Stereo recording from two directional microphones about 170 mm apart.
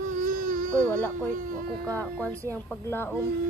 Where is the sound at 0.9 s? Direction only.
10° left (ahead or behind).